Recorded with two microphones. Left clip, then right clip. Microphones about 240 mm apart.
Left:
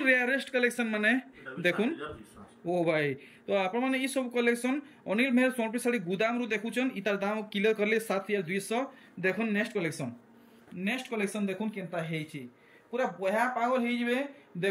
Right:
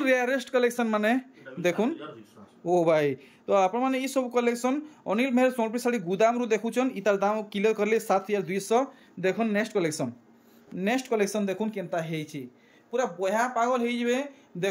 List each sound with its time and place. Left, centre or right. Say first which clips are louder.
0.0 s speech: right 2 dB; centre